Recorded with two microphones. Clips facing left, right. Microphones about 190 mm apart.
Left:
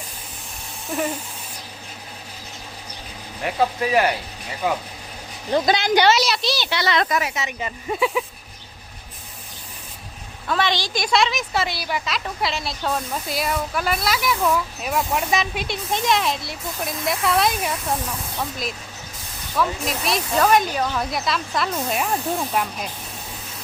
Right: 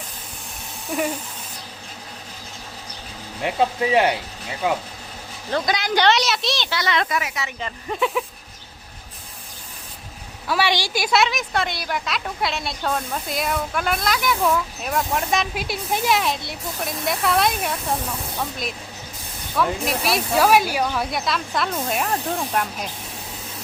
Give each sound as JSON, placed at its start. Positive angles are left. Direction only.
{"t": 0.9, "sound": "speech", "side_deg": 0}
{"t": 3.4, "sound": "speech", "side_deg": -20}
{"t": 5.6, "sound": "a woman's voice", "side_deg": 30}
{"t": 5.9, "sound": "a woman's voice", "side_deg": 5}
{"t": 6.8, "sound": "speech", "side_deg": 40}
{"t": 7.3, "sound": "a woman's voice", "side_deg": 20}
{"t": 7.6, "sound": "a woman's voice", "side_deg": 5}
{"t": 10.4, "sound": "a woman's voice", "side_deg": -10}